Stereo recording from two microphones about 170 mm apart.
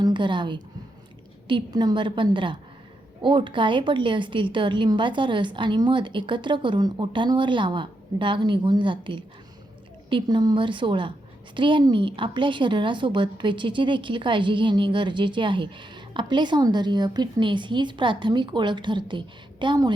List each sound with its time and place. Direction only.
0.0 s a woman's voice: 30° right (ahead or behind)